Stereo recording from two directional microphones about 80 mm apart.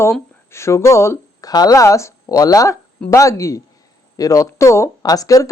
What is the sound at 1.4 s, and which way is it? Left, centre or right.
Speech, left.